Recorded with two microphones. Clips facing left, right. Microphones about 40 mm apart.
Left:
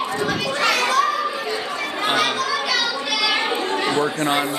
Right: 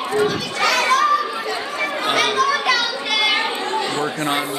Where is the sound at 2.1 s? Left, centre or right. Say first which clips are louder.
Right 4 dB; right.